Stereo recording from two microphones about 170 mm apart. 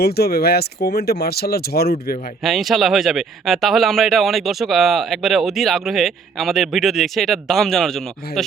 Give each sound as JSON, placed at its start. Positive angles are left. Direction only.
{"t": 0.0, "sound": "speech", "side_deg": 65}
{"t": 2.4, "sound": "speech", "side_deg": 0}